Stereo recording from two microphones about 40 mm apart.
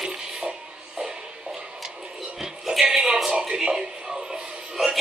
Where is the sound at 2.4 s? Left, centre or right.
Centre.